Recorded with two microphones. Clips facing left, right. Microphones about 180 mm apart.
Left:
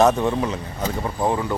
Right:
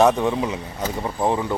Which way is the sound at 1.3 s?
20° right (ahead or behind).